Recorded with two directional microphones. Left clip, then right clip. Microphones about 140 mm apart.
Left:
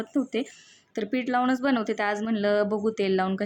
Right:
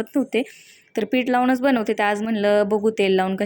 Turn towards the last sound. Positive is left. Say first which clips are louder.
# right 6 dB
turn(degrees=-15)  # may be behind; listen again after turning